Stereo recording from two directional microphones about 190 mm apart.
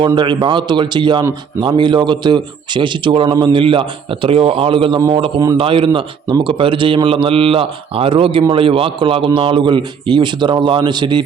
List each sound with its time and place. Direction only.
0.0 s a man's voice: 25° right (ahead or behind)